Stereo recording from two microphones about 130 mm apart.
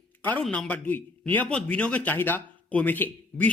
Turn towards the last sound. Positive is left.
turn(degrees=15)  # may be behind; listen again after turning